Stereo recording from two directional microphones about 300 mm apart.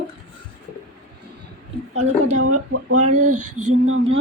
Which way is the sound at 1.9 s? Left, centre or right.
Right.